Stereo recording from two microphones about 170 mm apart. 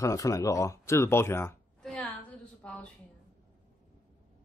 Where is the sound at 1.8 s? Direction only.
5° left (ahead or behind).